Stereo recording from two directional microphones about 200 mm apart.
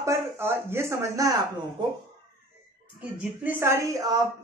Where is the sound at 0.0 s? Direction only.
15° right (ahead or behind).